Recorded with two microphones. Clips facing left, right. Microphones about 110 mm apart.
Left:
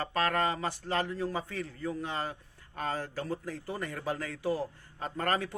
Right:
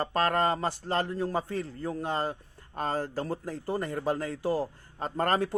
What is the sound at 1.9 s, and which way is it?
Speech, 50° right (ahead or behind).